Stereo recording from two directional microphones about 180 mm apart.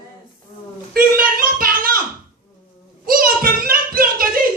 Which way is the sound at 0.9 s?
55° right (ahead or behind).